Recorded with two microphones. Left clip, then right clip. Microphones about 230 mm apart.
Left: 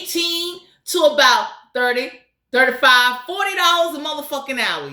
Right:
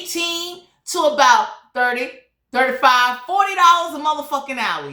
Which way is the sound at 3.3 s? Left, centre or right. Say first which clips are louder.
Right 5 dB; centre.